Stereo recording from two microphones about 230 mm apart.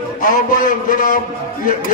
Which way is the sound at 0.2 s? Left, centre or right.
Left.